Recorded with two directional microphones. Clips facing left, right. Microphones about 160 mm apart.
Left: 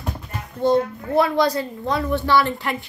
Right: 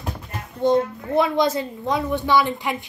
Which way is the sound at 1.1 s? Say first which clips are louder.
Left 1 dB; 20° right (ahead or behind).